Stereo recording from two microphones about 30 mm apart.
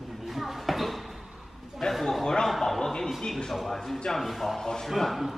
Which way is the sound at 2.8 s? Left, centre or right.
Centre.